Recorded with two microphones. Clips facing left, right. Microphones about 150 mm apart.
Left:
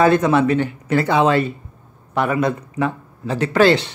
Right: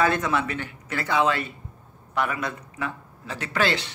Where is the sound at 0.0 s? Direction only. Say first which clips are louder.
Left 9 dB; 30° left (ahead or behind).